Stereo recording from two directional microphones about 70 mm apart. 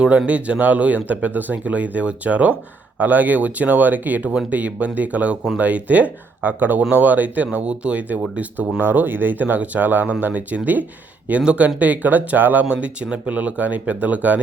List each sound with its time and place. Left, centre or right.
0.0 s speech: centre